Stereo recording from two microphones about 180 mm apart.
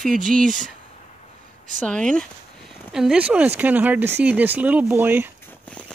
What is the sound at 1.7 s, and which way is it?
Speech, 5° left (ahead or behind).